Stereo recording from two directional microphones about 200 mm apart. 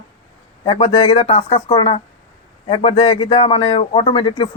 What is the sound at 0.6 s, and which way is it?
Speech, 25° left (ahead or behind).